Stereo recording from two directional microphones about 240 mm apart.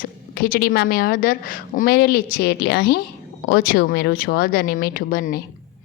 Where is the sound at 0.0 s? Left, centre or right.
Left.